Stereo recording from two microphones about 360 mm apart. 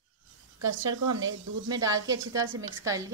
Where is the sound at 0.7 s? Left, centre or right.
Right.